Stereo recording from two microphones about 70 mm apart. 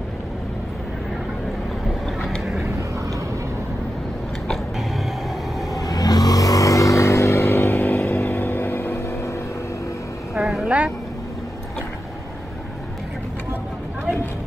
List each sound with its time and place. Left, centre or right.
2.2 s vehicle: centre
5.8 s vehicle: left
10.3 s a sound: centre